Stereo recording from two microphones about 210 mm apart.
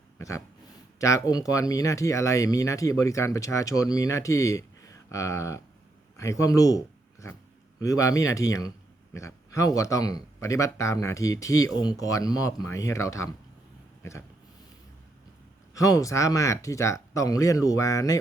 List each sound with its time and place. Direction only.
0.2 s speech: 15° left (ahead or behind)
14.0 s a sound: 10° left (ahead or behind)
15.7 s speech: 15° left (ahead or behind)